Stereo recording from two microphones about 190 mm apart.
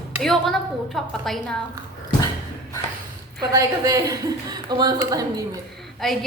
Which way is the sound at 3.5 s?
15° right (ahead or behind).